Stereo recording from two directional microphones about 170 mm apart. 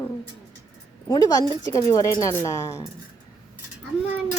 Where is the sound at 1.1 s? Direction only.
20° left (ahead or behind).